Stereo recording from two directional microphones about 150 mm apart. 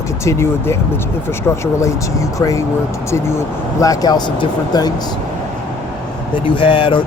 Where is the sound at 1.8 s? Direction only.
20° left (ahead or behind).